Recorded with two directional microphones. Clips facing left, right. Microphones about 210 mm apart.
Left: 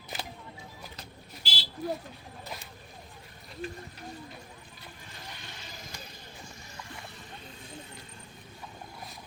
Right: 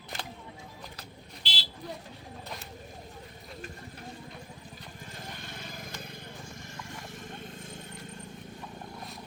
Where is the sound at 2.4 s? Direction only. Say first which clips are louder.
Left 1 dB; 5° left (ahead or behind).